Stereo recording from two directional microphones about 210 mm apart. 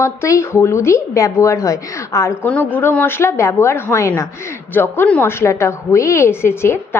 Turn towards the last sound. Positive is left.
turn(degrees=10)  # may be behind; listen again after turning